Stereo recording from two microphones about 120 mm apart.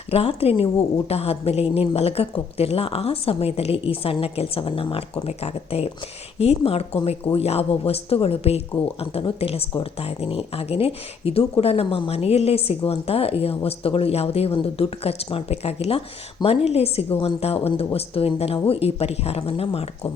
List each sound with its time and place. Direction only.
0.1 s speech: 55° left (ahead or behind)